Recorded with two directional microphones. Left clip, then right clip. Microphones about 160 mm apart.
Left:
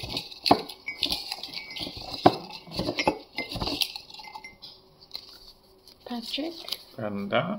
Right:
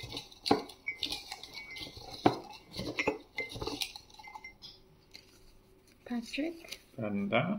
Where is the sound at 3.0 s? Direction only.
25° left (ahead or behind).